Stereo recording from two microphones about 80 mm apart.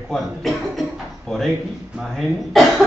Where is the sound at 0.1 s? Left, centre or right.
Centre.